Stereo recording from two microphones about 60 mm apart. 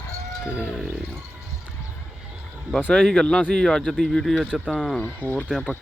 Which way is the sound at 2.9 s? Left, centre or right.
Centre.